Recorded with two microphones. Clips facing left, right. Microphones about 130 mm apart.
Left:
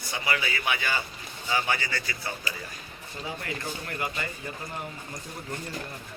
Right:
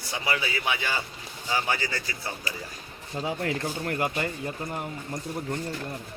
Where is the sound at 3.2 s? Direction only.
60° right (ahead or behind).